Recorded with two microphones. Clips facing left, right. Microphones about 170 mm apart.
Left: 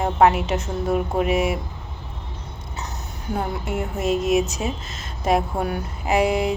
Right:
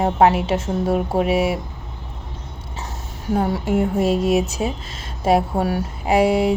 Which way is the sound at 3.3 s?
35° right (ahead or behind).